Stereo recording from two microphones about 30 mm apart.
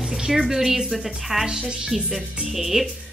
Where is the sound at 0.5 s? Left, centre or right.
Centre.